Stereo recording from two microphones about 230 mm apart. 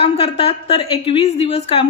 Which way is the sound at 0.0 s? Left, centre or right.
Left.